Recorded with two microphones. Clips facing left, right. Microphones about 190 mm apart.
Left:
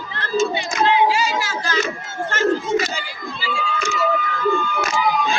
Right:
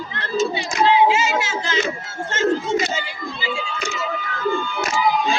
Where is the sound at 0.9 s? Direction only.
25° right (ahead or behind).